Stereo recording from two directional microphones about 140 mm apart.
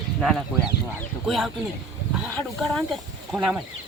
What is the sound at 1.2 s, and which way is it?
Speech, centre (ahead or behind).